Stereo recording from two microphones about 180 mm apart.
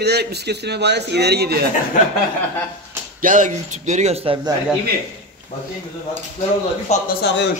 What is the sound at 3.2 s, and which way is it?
A man's voice, 45° right (ahead or behind).